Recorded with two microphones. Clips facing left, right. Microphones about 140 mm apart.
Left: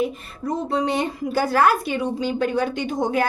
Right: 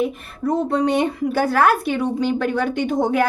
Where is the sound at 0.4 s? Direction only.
60° right (ahead or behind).